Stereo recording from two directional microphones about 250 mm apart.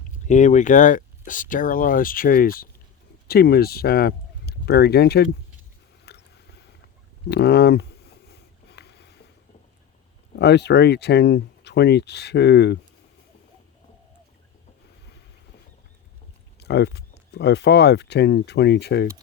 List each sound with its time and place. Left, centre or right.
0.3 s speech: left
6.1 s a sound: left
10.3 s speech: left
16.6 s speech: left